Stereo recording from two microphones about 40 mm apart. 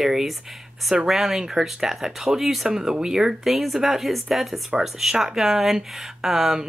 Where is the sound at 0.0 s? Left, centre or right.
Centre.